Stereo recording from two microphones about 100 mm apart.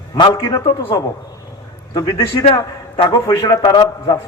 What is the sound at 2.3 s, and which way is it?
A man's voice, 60° left (ahead or behind).